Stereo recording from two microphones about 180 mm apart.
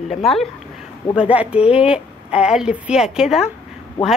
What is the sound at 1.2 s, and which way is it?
A woman's voice, 5° right (ahead or behind).